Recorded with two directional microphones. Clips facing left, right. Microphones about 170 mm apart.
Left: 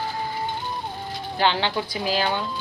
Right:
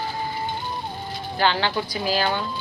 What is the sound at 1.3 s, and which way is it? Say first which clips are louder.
A woman's voice: even; 20° left (ahead or behind).